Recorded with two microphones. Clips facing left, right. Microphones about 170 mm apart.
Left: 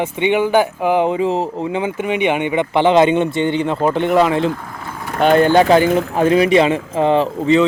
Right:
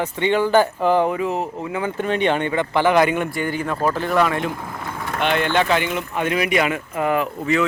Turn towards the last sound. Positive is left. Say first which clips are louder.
# left 6 dB
turn(degrees=25)  # may be behind; listen again after turning